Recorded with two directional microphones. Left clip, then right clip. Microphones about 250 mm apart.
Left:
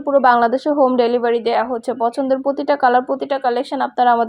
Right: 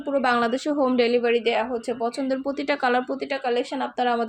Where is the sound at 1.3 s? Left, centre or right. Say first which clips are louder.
Left 5 dB; left.